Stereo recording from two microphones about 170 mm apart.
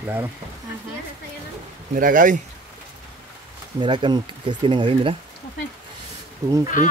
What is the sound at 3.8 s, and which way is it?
Speech, 25° right (ahead or behind).